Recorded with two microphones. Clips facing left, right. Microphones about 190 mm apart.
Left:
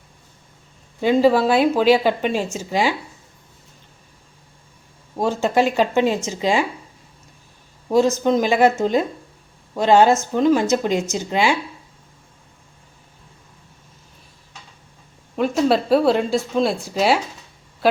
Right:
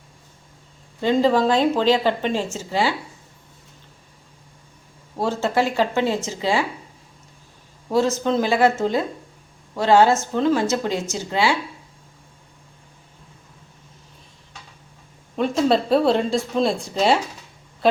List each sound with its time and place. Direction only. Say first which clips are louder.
1.0 s a woman's voice: left 2 dB; 10° left (ahead or behind)
5.1 s a woman's voice: left 3 dB; 15° left (ahead or behind)
7.9 s a woman's voice: left 3 dB; 15° left (ahead or behind)
15.4 s speech: left 1 dB; 5° left (ahead or behind)